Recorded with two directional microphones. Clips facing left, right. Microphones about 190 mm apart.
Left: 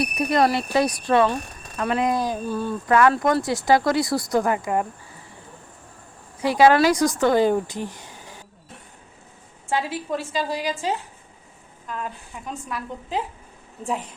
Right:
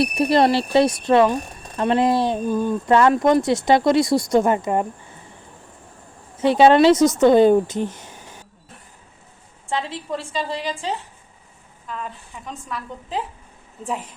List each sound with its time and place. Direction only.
0.0 s speech: 30° right (ahead or behind)
1.7 s speech: 30° right (ahead or behind)
2.4 s speech: 15° right (ahead or behind)
6.3 s speech: 25° right (ahead or behind)
9.6 s a woman's voice: 5° left (ahead or behind)